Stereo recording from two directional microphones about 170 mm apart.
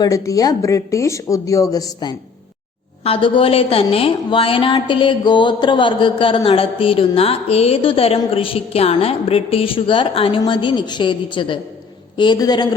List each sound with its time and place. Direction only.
0.0 s a woman's voice: 20° left (ahead or behind)